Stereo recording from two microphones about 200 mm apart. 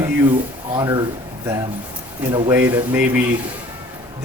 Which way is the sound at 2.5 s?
10° right (ahead or behind).